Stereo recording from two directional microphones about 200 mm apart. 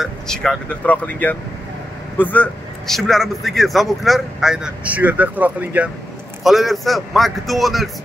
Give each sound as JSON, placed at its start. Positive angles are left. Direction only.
{"t": 0.0, "sound": "a man's voice", "side_deg": 0}